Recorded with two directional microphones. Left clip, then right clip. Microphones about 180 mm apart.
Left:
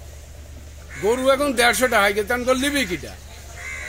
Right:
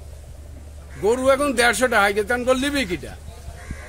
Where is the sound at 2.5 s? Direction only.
Centre (ahead or behind).